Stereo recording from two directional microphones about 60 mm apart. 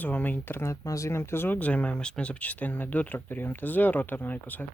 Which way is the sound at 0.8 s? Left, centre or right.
Left.